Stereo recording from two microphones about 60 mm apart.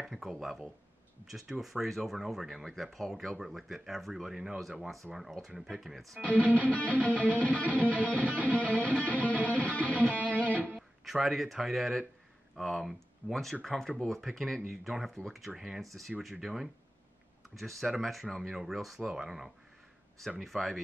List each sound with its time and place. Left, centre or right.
0.0 s speech: centre
6.1 s music: left
6.4 s music: right
6.7 s music: left
8.2 s music: right
8.5 s music: left
10.8 s speech: centre